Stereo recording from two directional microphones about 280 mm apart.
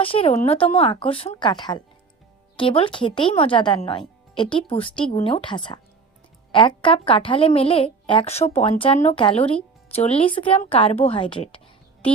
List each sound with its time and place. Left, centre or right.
0.0 s a woman's voice: centre